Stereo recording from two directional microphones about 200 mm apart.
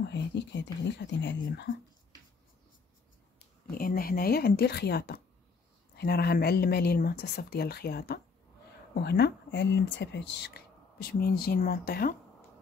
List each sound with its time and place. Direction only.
0.0 s speech: 60° left (ahead or behind)
3.7 s speech: 45° left (ahead or behind)